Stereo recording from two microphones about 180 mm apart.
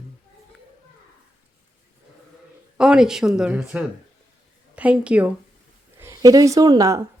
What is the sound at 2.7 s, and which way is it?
A woman's voice, 5° right (ahead or behind).